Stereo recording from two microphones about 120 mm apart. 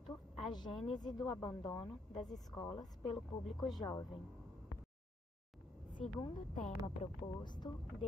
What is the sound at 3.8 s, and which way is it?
Speech, 30° left (ahead or behind).